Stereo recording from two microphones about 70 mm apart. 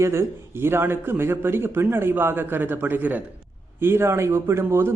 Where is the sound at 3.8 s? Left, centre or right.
Right.